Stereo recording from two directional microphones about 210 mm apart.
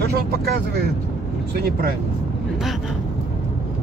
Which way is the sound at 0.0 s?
50° right (ahead or behind).